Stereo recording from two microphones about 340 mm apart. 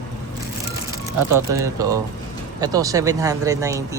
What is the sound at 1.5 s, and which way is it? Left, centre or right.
Speech, centre.